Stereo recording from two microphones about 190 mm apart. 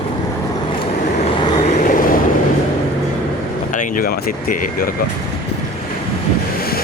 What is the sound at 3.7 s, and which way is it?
Vehicle, 45° left (ahead or behind).